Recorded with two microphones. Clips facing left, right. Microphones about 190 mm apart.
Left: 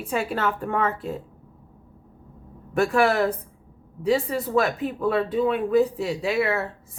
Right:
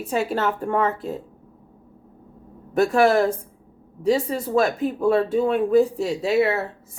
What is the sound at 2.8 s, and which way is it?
A woman's voice, 40° right (ahead or behind).